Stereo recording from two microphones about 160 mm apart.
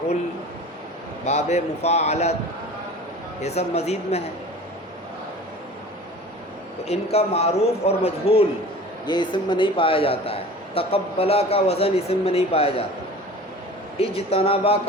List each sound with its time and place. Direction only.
1.2 s a man's voice: 45° left (ahead or behind)
3.4 s a man's voice: 40° left (ahead or behind)
6.8 s a man's voice: 40° left (ahead or behind)
14.0 s a man's voice: 40° left (ahead or behind)